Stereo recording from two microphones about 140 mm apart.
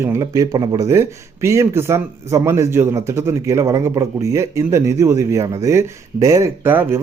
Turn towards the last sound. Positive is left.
turn(degrees=-15)  # may be behind; listen again after turning